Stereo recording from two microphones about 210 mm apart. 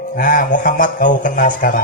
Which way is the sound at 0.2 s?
40° left (ahead or behind).